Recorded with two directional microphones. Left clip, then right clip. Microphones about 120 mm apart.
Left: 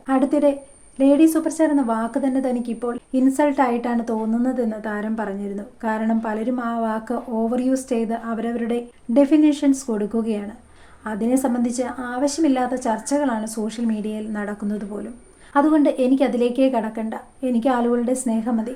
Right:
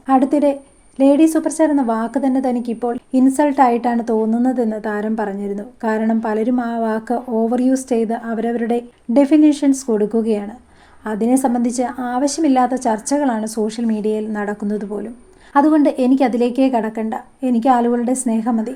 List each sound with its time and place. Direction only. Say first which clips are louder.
0.1 s a woman's voice: right 4 dB; 35° right (ahead or behind)